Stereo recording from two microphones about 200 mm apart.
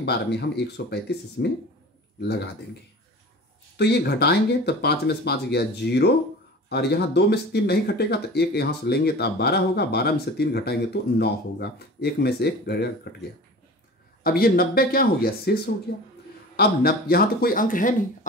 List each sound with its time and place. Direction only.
0.0 s speech: 55° left (ahead or behind)
3.7 s speech: 55° left (ahead or behind)
14.2 s speech: 45° left (ahead or behind)